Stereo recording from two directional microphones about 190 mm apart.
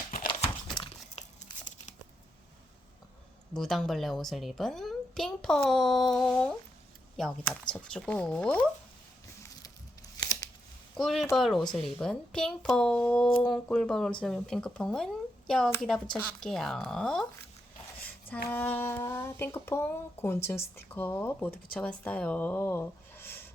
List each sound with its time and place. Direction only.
0.3 s crumpling: 30° left (ahead or behind)
3.5 s a woman's voice: centre (ahead or behind)
10.9 s a woman's voice: centre (ahead or behind)
18.5 s speech: 10° left (ahead or behind)